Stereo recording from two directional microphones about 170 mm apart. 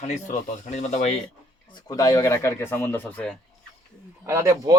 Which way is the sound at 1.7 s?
25° left (ahead or behind).